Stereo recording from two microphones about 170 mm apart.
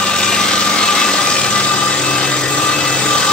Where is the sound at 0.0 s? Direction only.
5° left (ahead or behind).